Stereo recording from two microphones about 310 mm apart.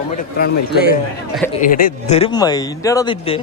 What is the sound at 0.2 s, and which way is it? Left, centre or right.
A man's voice, left.